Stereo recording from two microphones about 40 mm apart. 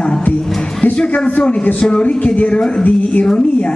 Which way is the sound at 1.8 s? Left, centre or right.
Left.